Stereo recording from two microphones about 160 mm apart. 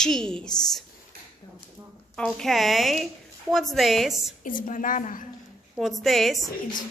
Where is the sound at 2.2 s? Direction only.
5° left (ahead or behind).